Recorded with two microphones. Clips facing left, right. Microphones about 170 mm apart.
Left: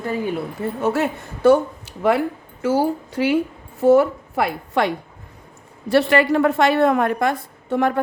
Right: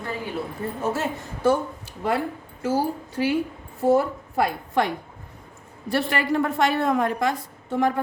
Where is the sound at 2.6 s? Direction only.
85° left; by 8.0 s 65° left (ahead or behind).